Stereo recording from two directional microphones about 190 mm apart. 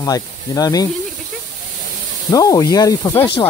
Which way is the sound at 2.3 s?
20° left (ahead or behind).